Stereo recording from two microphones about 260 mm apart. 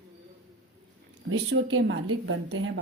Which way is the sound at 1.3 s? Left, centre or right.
Right.